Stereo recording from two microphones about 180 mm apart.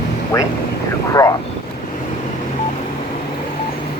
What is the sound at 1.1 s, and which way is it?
Speech, 20° left (ahead or behind).